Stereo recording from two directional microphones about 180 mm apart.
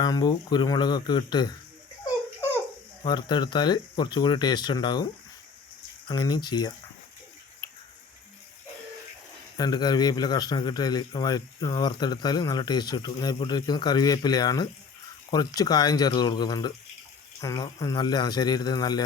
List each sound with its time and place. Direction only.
0.0 s a man's voice: 20° left (ahead or behind)
3.0 s a man's voice: 25° left (ahead or behind)
6.1 s a man's voice: 25° left (ahead or behind)
9.6 s a man's voice: 20° left (ahead or behind)